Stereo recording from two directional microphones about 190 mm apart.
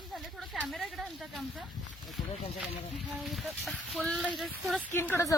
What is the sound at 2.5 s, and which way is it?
Speech, centre (ahead or behind).